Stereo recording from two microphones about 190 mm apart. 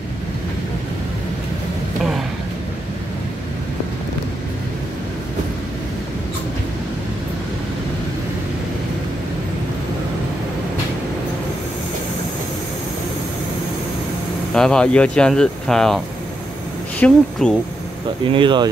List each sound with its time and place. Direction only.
14.5 s speech: 5° left (ahead or behind)
17.0 s speech: 5° left (ahead or behind)
18.2 s speech: 25° right (ahead or behind)